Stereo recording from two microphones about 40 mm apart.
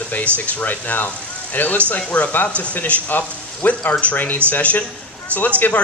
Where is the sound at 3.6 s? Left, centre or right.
Left.